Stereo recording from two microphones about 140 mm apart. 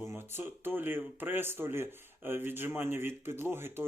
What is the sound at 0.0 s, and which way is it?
Speech, 20° right (ahead or behind).